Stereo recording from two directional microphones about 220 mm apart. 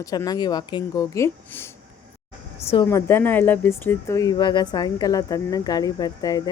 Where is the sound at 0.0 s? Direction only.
15° left (ahead or behind).